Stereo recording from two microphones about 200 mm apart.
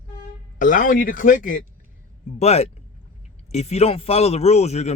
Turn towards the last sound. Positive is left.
turn(degrees=35)  # may be behind; listen again after turning